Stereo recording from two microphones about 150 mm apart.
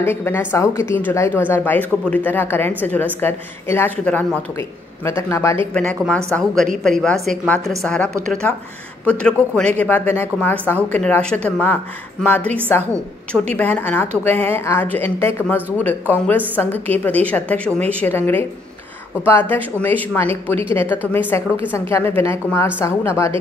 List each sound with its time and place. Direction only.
0.0 s a man's voice: 15° left (ahead or behind)
5.7 s speech: 5° left (ahead or behind)